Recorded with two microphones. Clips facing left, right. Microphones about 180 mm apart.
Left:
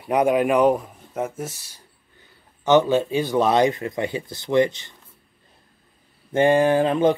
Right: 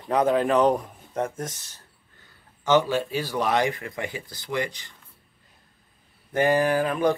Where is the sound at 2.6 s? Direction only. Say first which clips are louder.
Left 4 dB; 20° left (ahead or behind).